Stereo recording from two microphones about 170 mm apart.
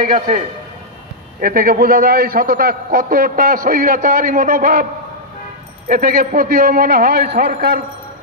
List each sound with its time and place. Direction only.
1.4 s a man's voice: 60° right (ahead or behind)
5.9 s a man's voice: 55° right (ahead or behind)